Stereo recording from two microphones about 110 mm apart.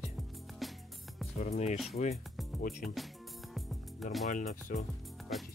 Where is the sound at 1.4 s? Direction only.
90° left.